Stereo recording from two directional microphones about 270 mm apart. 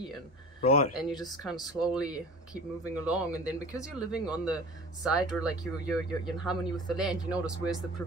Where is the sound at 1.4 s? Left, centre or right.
Centre.